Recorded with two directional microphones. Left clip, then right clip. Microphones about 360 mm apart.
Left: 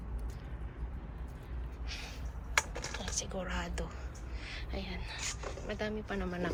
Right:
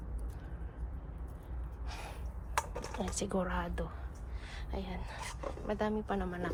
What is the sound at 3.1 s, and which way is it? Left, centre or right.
Speech, centre.